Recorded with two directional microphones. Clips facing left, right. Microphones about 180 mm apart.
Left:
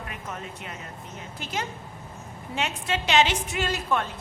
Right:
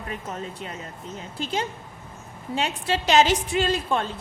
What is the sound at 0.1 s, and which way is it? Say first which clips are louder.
A woman's voice: right 4 dB; 30° right (ahead or behind).